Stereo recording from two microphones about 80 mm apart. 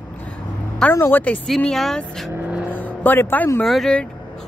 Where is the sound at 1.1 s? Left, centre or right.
Centre.